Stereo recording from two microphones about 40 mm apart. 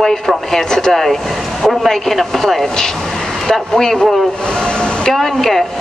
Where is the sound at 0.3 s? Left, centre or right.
Centre.